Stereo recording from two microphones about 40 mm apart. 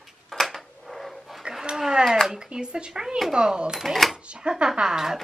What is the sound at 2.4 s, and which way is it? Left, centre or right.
Speech, right.